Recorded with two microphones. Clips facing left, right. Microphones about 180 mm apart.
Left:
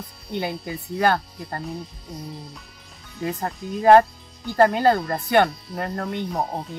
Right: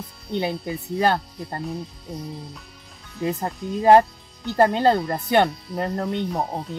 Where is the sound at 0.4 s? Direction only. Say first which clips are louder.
Right 2 dB; 25° right (ahead or behind).